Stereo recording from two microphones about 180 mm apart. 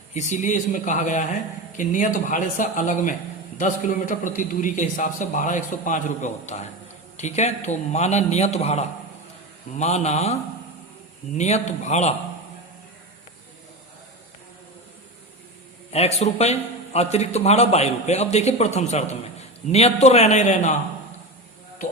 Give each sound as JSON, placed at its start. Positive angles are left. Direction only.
{"t": 0.1, "sound": "a man's voice", "side_deg": 40}
{"t": 11.3, "sound": "a man's voice", "side_deg": 40}
{"t": 15.9, "sound": "a man's voice", "side_deg": 35}